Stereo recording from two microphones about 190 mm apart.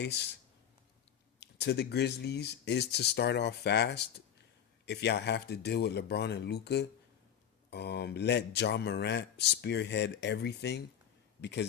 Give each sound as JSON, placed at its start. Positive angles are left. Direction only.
{"t": 1.4, "sound": "speech", "side_deg": 65}